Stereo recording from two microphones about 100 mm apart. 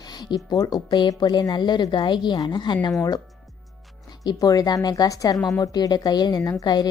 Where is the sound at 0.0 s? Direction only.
45° left (ahead or behind).